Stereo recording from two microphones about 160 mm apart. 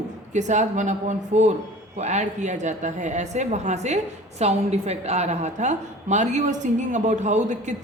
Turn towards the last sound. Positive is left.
turn(degrees=-50)  # may be behind; listen again after turning